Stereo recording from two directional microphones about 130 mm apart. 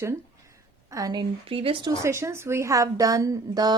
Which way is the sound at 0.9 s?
30° right (ahead or behind).